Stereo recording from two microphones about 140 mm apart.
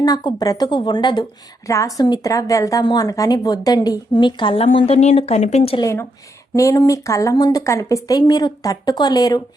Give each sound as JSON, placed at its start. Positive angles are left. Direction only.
{"t": 0.0, "sound": "a woman's voice", "side_deg": 30}
{"t": 6.5, "sound": "a woman's voice", "side_deg": 25}